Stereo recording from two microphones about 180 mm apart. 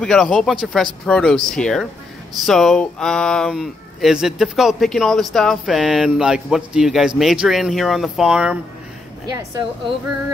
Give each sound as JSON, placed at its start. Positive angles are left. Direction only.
{"t": 0.0, "sound": "speech", "side_deg": 5}
{"t": 9.2, "sound": "a woman's voice", "side_deg": -20}